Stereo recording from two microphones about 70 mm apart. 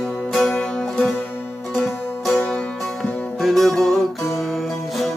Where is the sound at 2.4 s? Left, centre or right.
Centre.